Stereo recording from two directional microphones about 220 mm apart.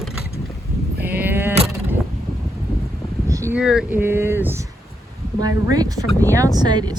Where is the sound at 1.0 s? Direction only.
10° right (ahead or behind).